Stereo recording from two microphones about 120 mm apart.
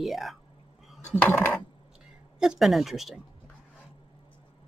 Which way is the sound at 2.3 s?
5° right (ahead or behind).